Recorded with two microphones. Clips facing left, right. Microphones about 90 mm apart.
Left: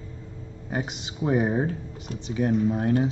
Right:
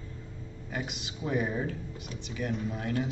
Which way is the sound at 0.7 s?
30° left (ahead or behind).